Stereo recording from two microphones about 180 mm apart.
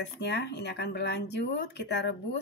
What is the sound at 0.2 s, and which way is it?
Speech, 70° left (ahead or behind).